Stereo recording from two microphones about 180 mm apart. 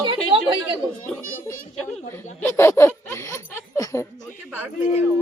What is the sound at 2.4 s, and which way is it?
Snicker, 15° left (ahead or behind).